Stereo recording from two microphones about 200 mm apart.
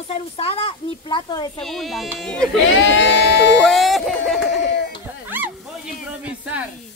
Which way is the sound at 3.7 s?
Centre (ahead or behind).